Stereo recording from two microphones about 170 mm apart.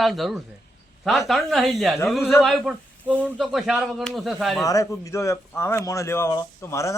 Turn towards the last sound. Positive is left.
turn(degrees=15)  # may be behind; listen again after turning